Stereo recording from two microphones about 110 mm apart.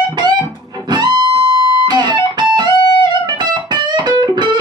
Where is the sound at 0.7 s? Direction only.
40° right (ahead or behind).